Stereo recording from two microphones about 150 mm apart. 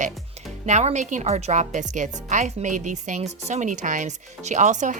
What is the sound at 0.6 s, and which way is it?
A woman's voice, 50° right (ahead or behind).